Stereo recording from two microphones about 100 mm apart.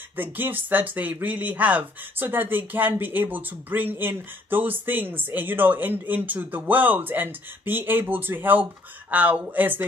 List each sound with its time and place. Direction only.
0.2 s speech: 20° right (ahead or behind)